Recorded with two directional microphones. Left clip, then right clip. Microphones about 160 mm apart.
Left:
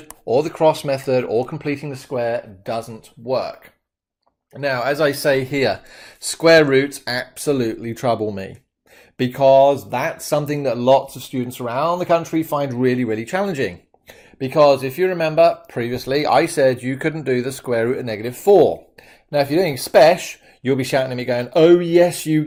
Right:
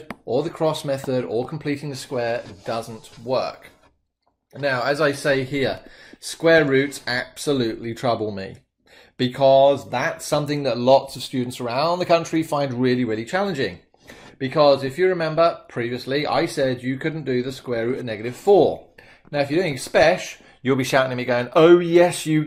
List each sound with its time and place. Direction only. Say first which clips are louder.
0.3 s speech: left 6 dB; 30° left (ahead or behind)
4.6 s speech: left 2 dB; 40° left (ahead or behind)